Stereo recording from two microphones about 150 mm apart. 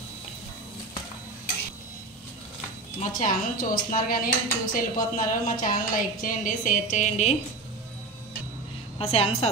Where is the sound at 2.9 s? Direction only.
65° left (ahead or behind).